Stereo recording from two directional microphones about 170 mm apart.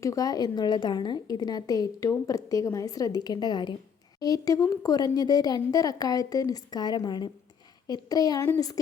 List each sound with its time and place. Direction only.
0.0 s a woman's voice: 20° left (ahead or behind)